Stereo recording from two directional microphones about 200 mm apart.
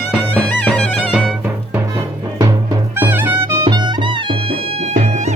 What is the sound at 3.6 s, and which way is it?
Music, 20° right (ahead or behind).